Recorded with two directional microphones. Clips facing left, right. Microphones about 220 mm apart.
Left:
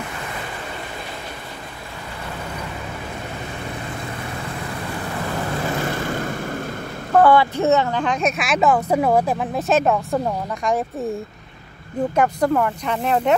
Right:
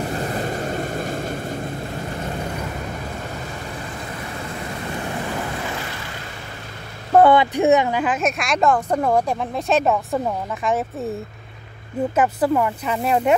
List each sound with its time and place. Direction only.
0.0 s vehicle: 40° right (ahead or behind)
5.9 s vehicle: 50° left (ahead or behind)
7.2 s a woman's voice: 20° right (ahead or behind); by 10.8 s centre (ahead or behind)
12.2 s a woman's voice: 5° right (ahead or behind)